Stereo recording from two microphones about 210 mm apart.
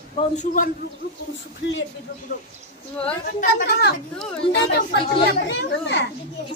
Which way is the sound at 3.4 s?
45° left (ahead or behind).